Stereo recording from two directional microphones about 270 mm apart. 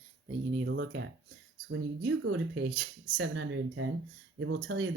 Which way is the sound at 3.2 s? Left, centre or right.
Right.